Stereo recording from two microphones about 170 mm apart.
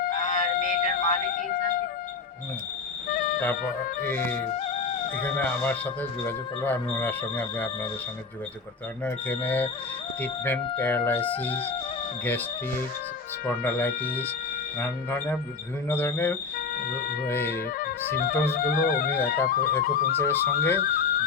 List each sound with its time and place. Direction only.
0.0 s music: 55° left (ahead or behind)
3.1 s music: 60° left (ahead or behind)
4.0 s speech: 10° left (ahead or behind)
4.5 s music: 40° left (ahead or behind)
5.2 s speech: 10° left (ahead or behind)
9.0 s speech: 10° left (ahead or behind)
13.5 s speech: 10° left (ahead or behind)
16.9 s speech: 60° left (ahead or behind)
17.2 s speech: 15° left (ahead or behind)
17.7 s music: 60° left (ahead or behind)
18.6 s speech: 55° left (ahead or behind)
20.1 s speech: 15° left (ahead or behind)
20.8 s music: 55° left (ahead or behind)